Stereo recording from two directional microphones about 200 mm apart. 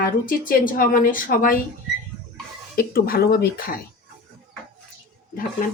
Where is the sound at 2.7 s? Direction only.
50° left (ahead or behind).